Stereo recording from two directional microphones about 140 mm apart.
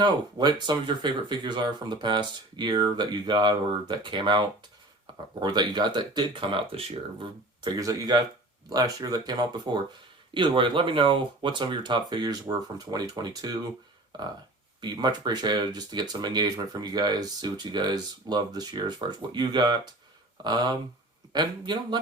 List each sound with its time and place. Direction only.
0.0 s speech: 30° right (ahead or behind)
7.8 s speech: 25° right (ahead or behind)